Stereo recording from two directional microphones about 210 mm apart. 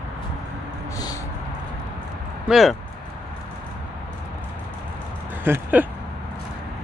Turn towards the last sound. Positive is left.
turn(degrees=-10)  # may be behind; listen again after turning